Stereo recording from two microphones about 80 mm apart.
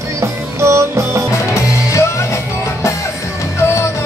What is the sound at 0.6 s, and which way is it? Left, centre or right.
Music, right.